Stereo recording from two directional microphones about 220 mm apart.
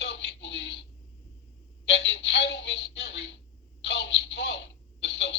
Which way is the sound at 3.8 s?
50° left (ahead or behind).